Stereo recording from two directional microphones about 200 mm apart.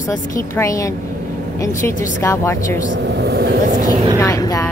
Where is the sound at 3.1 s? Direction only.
55° right (ahead or behind).